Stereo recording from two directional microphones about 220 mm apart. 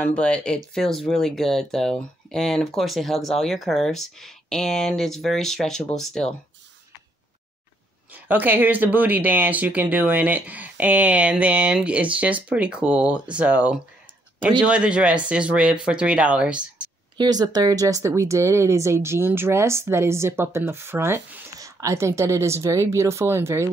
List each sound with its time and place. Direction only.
0.0 s speech: 5° left (ahead or behind)
8.1 s speech: 10° right (ahead or behind)
17.2 s speech: 20° right (ahead or behind)